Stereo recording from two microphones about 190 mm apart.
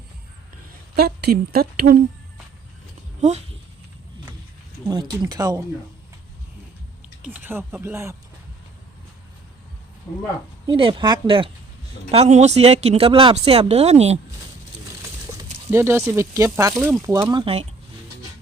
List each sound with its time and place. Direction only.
0.9 s a woman's voice: 55° right (ahead or behind)
3.2 s speech: 35° right (ahead or behind)
4.9 s speech: 25° right (ahead or behind)
7.2 s speech: 10° right (ahead or behind)
10.7 s speech: 25° right (ahead or behind)
15.7 s speech: 15° right (ahead or behind)
17.4 s speech: 30° right (ahead or behind)